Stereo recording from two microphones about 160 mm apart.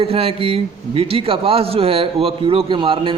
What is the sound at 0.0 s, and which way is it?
A man's voice, 35° right (ahead or behind).